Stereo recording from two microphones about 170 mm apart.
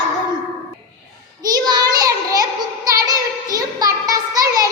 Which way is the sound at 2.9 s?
20° right (ahead or behind).